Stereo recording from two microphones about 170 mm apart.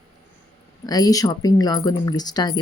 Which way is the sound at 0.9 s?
20° left (ahead or behind).